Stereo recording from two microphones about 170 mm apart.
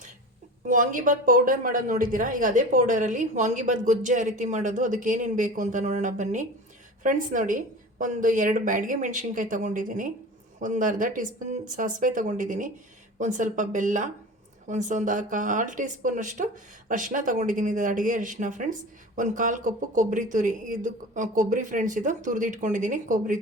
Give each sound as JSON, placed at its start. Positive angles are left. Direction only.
{"t": 0.7, "sound": "speech", "side_deg": -50}